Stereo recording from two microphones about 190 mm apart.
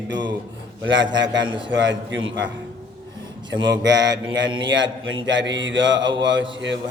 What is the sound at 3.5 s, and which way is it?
Mantra, 70° right (ahead or behind).